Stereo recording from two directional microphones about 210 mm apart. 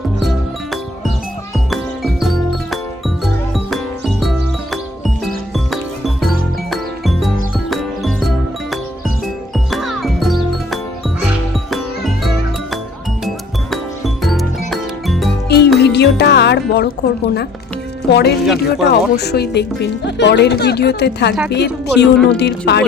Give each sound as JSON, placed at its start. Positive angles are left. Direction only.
{"t": 1.5, "sound": "music", "side_deg": 0}
{"t": 6.7, "sound": "music", "side_deg": 0}
{"t": 9.6, "sound": "music", "side_deg": 0}
{"t": 15.4, "sound": "music", "side_deg": 50}
{"t": 18.1, "sound": "speech", "side_deg": 55}